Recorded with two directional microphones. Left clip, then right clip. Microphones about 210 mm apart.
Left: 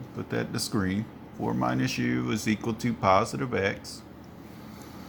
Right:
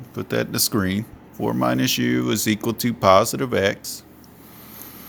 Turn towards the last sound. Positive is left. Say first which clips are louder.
# right 7 dB
turn(degrees=-50)  # may be behind; listen again after turning